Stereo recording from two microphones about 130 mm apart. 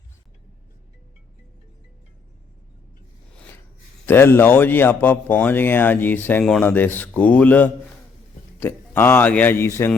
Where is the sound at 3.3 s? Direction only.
15° left (ahead or behind).